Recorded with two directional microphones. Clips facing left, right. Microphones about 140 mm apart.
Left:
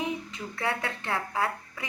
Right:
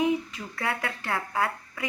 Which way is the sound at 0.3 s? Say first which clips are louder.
Even; 25° left (ahead or behind).